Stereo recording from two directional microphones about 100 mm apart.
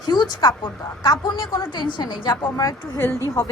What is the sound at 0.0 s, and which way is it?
A woman's voice, 45° left (ahead or behind).